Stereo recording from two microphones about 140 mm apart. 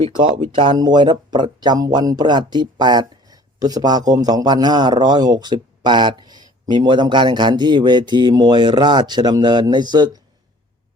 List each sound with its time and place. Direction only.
0.0 s speech: 40° right (ahead or behind)